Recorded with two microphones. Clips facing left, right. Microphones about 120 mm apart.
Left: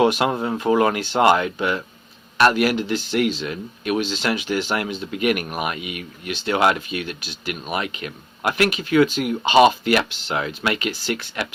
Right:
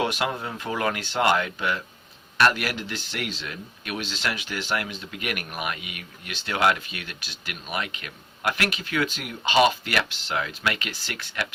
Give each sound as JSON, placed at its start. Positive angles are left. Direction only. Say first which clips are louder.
{"t": 0.0, "sound": "speech", "louder": "left 8 dB", "side_deg": 25}
{"t": 9.4, "sound": "speech", "louder": "left 5 dB", "side_deg": 25}